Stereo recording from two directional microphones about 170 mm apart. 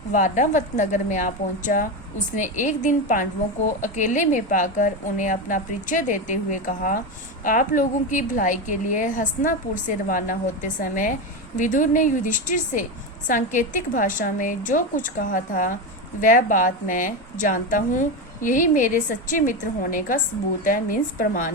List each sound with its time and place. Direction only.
0.1 s a woman's voice: 45° left (ahead or behind)